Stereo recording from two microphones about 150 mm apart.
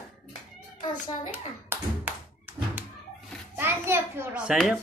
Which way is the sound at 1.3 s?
10° right (ahead or behind).